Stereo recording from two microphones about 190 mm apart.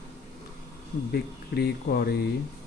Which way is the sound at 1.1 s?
60° left (ahead or behind).